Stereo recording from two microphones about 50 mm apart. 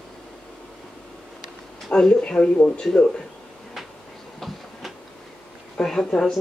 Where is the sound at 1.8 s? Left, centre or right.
Centre.